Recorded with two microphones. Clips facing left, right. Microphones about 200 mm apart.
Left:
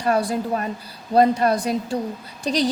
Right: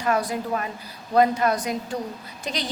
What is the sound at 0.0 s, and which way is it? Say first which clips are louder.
A woman's voice: left 3 dB; 30° left (ahead or behind).